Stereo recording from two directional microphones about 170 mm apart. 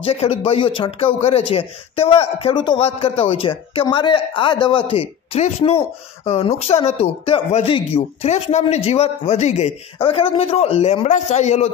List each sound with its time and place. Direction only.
0.0 s a man's voice: 35° left (ahead or behind)